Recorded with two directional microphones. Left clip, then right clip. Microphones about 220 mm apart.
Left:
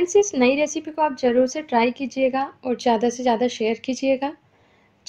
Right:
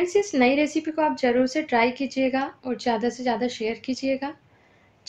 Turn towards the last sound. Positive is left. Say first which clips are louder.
# left 5 dB
turn(degrees=35)  # may be behind; listen again after turning